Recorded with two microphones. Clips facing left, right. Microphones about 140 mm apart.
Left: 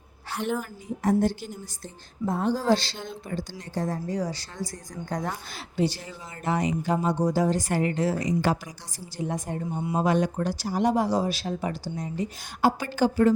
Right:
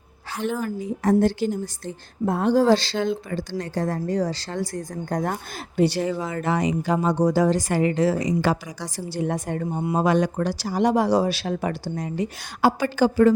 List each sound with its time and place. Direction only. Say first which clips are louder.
0.3 s a woman's voice: right 2 dB; centre (ahead or behind)
0.6 s speech: right 5 dB; 90° right
3.6 s speech: right 4 dB; 65° right (ahead or behind); by 13.3 s 90° right